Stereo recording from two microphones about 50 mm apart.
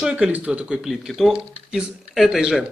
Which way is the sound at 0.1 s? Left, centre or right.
Right.